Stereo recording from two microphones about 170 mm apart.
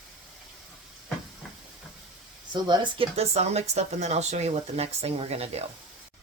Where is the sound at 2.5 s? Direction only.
30° right (ahead or behind).